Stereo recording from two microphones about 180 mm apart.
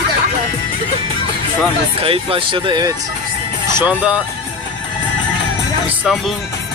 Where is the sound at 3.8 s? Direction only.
10° right (ahead or behind).